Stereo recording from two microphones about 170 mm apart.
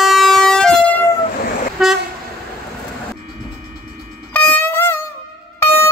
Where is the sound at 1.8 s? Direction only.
Centre (ahead or behind).